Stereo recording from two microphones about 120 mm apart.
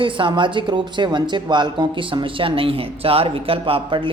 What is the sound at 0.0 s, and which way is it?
Speech, 45° right (ahead or behind).